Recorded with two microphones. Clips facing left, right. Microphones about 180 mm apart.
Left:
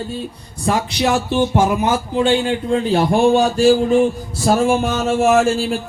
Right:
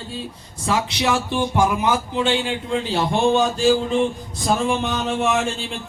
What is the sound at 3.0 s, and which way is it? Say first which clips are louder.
Speech: left 3 dB; 35° left (ahead or behind).